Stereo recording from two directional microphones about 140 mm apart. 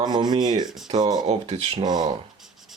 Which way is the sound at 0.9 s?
30° right (ahead or behind).